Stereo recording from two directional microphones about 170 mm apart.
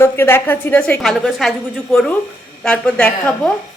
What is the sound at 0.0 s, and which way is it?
A woman's voice, 15° left (ahead or behind).